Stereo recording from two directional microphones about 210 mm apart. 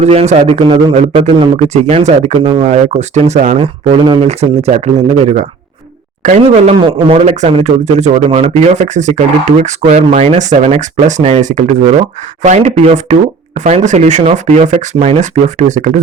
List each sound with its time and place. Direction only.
0.0 s speech: 30° right (ahead or behind)